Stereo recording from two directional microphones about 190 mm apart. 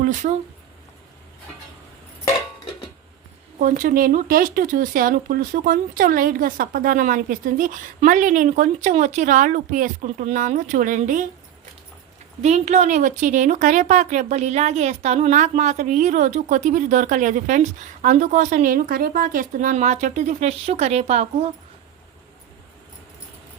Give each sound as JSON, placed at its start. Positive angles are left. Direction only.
{"t": 0.0, "sound": "speech", "side_deg": -40}
{"t": 3.6, "sound": "speech", "side_deg": -45}
{"t": 12.4, "sound": "a woman's voice", "side_deg": -35}